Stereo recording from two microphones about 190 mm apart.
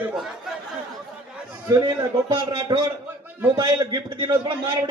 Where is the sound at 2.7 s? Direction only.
20° right (ahead or behind).